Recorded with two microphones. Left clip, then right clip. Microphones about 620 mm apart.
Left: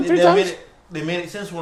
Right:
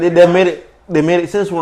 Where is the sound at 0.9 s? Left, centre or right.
Right.